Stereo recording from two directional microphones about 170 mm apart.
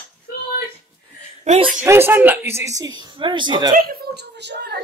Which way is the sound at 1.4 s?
35° right (ahead or behind).